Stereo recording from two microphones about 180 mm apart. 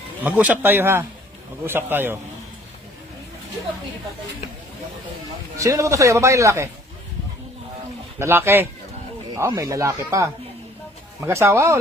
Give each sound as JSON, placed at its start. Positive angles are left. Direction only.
{"t": 0.2, "sound": "a man's voice", "side_deg": -10}
{"t": 5.5, "sound": "a man's voice", "side_deg": -20}
{"t": 8.2, "sound": "a man's voice", "side_deg": -10}